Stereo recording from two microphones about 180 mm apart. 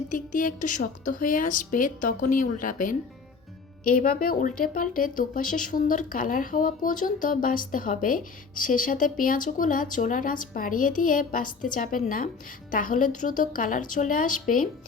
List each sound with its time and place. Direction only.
0.1 s speech: 50° left (ahead or behind)